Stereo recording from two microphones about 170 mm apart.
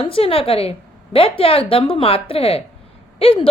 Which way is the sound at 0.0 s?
35° left (ahead or behind).